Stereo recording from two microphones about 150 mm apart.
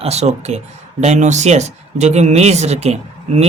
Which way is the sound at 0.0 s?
45° right (ahead or behind).